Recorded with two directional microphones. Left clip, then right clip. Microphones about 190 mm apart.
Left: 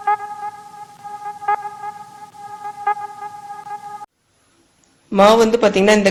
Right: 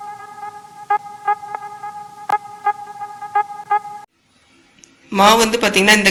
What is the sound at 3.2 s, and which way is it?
Vehicle, centre (ahead or behind).